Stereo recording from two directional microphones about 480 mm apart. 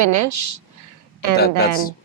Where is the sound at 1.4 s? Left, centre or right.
Centre.